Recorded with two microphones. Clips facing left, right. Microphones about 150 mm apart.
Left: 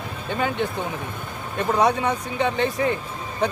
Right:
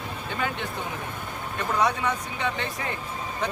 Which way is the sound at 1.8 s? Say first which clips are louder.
Left 4 dB; 25° left (ahead or behind).